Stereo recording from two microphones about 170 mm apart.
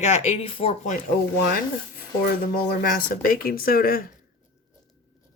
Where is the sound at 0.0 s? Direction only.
40° left (ahead or behind).